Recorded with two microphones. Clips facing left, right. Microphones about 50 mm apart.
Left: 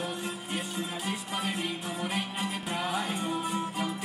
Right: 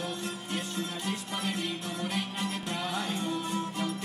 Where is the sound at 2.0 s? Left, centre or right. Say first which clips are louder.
Left 1 dB; centre.